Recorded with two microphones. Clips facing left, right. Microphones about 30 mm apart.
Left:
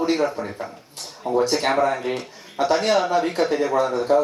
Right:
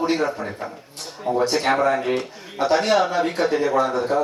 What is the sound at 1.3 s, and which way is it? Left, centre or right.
Speech, right.